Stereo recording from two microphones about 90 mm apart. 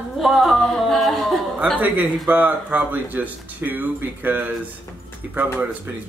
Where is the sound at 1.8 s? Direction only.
20° right (ahead or behind).